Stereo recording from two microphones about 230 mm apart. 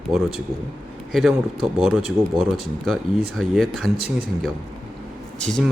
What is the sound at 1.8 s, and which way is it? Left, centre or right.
Speech, centre.